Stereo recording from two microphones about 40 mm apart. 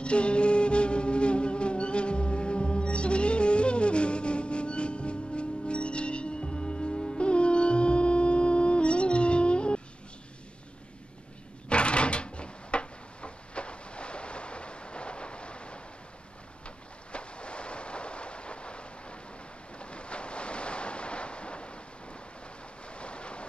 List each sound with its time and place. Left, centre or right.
0.0 s music: left
11.7 s a sound: left
19.8 s ocean: left
22.8 s waves: left